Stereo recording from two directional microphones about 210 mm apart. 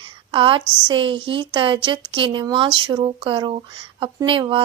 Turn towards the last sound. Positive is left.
turn(degrees=-25)  # may be behind; listen again after turning